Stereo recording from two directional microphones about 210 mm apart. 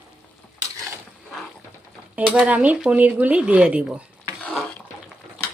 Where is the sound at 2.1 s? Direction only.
5° right (ahead or behind).